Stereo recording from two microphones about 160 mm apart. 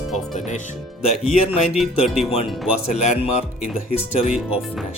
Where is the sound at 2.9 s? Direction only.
45° left (ahead or behind).